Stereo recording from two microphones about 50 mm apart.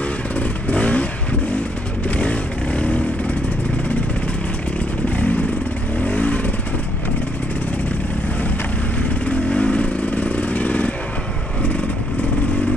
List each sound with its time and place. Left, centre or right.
0.4 s vehicle: left
2.0 s vehicle: left
5.1 s vehicle: left
9.2 s motorcycle: left